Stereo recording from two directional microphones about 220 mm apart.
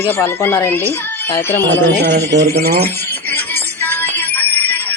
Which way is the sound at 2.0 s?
50° right (ahead or behind).